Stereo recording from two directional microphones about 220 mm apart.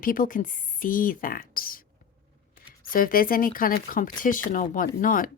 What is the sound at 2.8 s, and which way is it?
A woman's voice, 40° left (ahead or behind).